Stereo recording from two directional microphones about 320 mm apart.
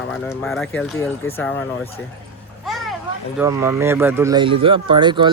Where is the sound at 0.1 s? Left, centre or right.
Centre.